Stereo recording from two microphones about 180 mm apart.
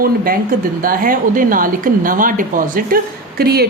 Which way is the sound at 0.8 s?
50° right (ahead or behind).